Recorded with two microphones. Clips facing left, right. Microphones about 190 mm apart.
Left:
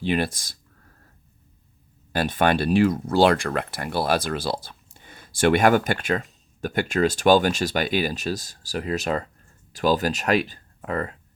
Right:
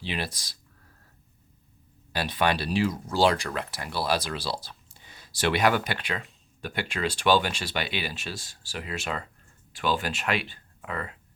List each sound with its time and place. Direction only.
0.0 s speech: 50° left (ahead or behind)
2.1 s speech: 50° left (ahead or behind)